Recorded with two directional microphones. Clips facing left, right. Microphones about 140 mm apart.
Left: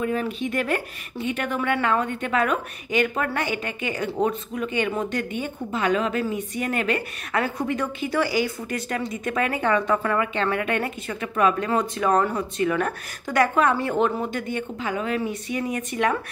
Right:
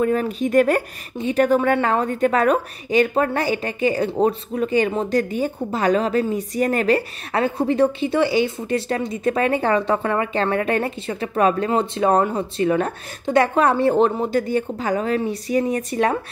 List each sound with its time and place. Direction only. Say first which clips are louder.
0.0 s a woman's voice: right 5 dB; 40° right (ahead or behind)